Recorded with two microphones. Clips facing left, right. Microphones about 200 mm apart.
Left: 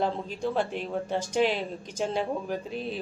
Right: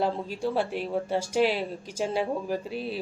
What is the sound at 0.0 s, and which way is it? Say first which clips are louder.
Speech: right 1 dB; 5° right (ahead or behind).